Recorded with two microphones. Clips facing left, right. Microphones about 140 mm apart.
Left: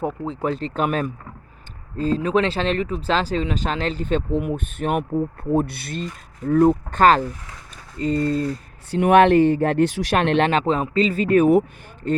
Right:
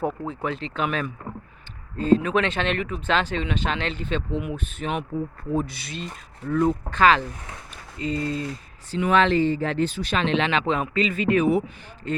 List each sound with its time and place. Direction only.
0.4 s speech: 40° left (ahead or behind)
8.9 s speech: 60° left (ahead or behind)